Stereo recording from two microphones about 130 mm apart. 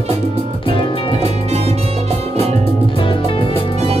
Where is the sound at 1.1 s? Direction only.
55° right (ahead or behind).